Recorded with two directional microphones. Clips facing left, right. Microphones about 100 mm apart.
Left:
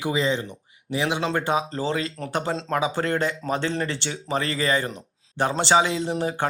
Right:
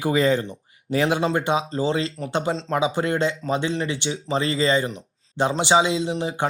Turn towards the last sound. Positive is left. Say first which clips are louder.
# right 1 dB
turn(degrees=-15)  # may be behind; listen again after turning